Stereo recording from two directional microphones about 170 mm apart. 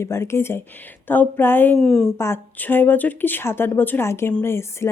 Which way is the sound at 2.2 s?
15° left (ahead or behind).